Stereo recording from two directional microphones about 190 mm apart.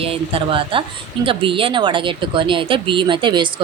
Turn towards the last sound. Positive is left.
turn(degrees=-25)  # may be behind; listen again after turning